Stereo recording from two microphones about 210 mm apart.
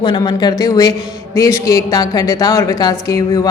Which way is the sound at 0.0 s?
20° left (ahead or behind).